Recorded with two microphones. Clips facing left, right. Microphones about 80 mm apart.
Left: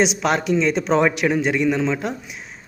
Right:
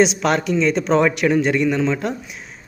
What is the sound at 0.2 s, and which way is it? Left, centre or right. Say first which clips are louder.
Speech: right 1 dB; centre.